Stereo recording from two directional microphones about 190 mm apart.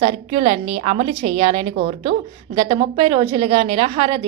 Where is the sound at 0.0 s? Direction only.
30° right (ahead or behind).